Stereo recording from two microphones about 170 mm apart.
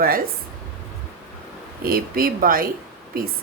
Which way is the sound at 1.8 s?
60° right (ahead or behind).